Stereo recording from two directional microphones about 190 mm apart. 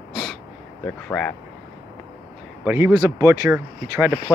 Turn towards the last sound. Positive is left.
turn(degrees=-10)  # may be behind; listen again after turning